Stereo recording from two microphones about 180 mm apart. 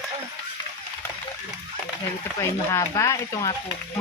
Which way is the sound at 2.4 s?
15° left (ahead or behind).